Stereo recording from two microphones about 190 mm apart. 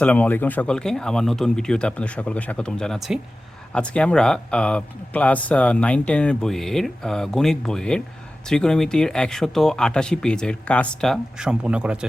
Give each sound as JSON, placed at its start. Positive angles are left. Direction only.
{"t": 0.0, "sound": "speech", "side_deg": 10}